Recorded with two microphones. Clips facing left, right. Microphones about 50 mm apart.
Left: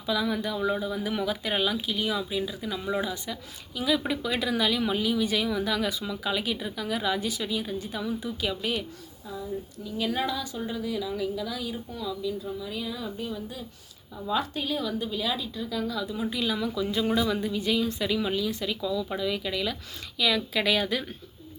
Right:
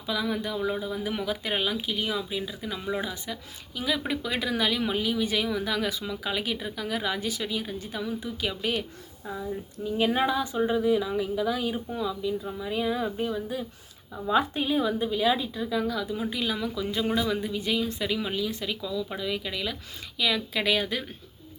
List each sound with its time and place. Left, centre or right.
0.1 s speech: right
0.6 s speech: centre
0.9 s speech: right
9.8 s speech: right